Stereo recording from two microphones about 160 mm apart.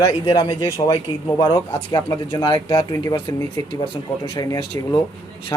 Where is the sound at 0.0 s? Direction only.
25° left (ahead or behind).